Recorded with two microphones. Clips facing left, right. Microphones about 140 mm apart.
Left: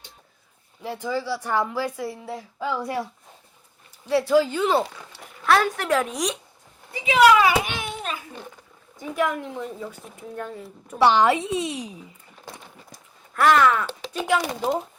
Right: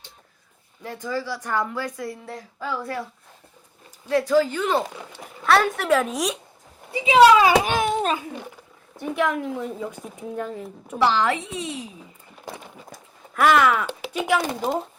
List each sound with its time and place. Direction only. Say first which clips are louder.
0.8 s speech: left 1 dB; 10° left (ahead or behind)
2.6 s speech: left 2 dB; 15° left (ahead or behind)
4.1 s speech: even; 10° left (ahead or behind)
5.4 s a woman's voice: right 1 dB; centre (ahead or behind)
7.1 s a child's voice: right 3 dB; 25° right (ahead or behind)
7.7 s a sound: right 9 dB; 45° right (ahead or behind)
9.0 s a woman's voice: right 1 dB; centre (ahead or behind)
11.0 s a child's voice: left 3 dB; 20° left (ahead or behind)
13.3 s speech: even; 5° right (ahead or behind)